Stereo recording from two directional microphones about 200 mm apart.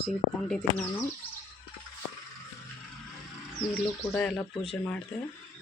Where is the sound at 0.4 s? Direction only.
Centre (ahead or behind).